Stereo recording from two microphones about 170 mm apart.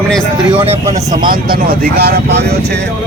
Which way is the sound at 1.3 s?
60° right (ahead or behind).